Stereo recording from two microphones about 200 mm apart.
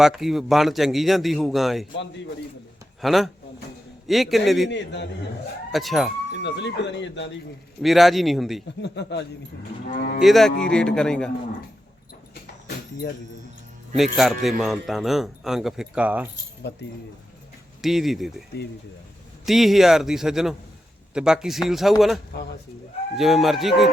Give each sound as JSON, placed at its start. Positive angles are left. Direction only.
{"t": 0.0, "sound": "speech", "side_deg": 0}
{"t": 3.0, "sound": "speech", "side_deg": 0}
{"t": 4.7, "sound": "speech", "side_deg": 60}
{"t": 5.7, "sound": "speech", "side_deg": 0}
{"t": 6.3, "sound": "speech", "side_deg": 60}
{"t": 7.8, "sound": "speech", "side_deg": 0}
{"t": 8.8, "sound": "speech", "side_deg": 60}
{"t": 10.2, "sound": "speech", "side_deg": 0}
{"t": 12.3, "sound": "a sound", "side_deg": 55}
{"t": 13.9, "sound": "speech", "side_deg": 0}
{"t": 16.7, "sound": "speech", "side_deg": 60}
{"t": 17.8, "sound": "speech", "side_deg": 0}
{"t": 19.5, "sound": "speech", "side_deg": 0}